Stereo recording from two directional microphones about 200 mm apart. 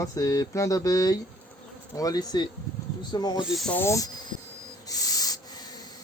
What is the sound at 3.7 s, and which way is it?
Speech, 15° left (ahead or behind).